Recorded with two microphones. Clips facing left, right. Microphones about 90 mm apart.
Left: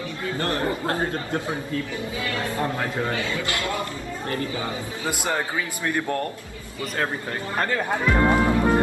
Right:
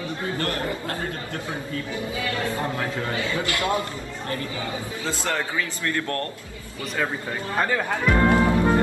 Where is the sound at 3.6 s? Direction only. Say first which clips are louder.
Right 3 dB; 20° right (ahead or behind).